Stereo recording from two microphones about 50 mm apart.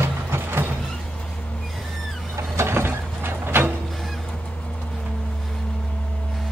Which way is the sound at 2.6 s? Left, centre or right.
Right.